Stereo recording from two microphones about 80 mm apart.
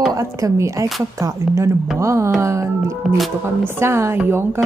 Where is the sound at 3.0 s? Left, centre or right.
Centre.